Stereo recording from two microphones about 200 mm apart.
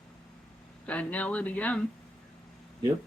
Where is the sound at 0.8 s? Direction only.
5° left (ahead or behind).